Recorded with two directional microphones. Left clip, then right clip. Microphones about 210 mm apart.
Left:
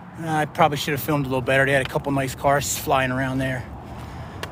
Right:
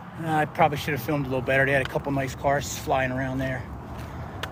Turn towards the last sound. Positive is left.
turn(degrees=35)  # may be behind; listen again after turning